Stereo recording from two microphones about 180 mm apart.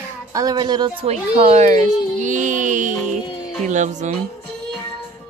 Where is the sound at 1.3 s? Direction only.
35° right (ahead or behind).